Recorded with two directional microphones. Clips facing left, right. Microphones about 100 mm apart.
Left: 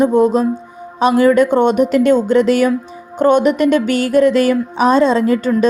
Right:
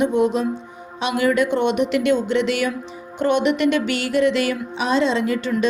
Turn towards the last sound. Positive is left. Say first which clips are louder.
# left 7 dB
turn(degrees=40)  # may be behind; listen again after turning